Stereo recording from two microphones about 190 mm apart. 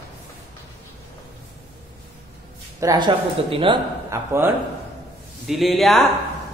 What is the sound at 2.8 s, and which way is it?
A woman's voice, 20° right (ahead or behind).